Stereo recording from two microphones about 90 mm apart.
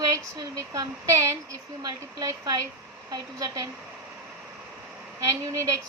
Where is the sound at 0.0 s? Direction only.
35° right (ahead or behind).